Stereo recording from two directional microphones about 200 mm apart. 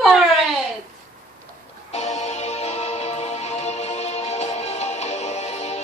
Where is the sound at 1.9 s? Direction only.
35° left (ahead or behind).